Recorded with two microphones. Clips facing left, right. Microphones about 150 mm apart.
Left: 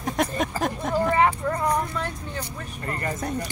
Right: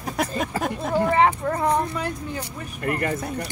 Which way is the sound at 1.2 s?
25° right (ahead or behind).